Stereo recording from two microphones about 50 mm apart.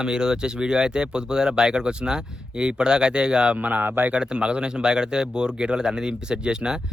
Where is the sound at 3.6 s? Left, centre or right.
Right.